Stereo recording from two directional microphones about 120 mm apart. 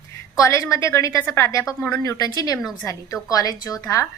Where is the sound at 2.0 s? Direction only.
30° left (ahead or behind).